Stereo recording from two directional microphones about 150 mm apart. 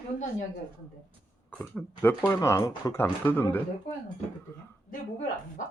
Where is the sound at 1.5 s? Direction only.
10° left (ahead or behind).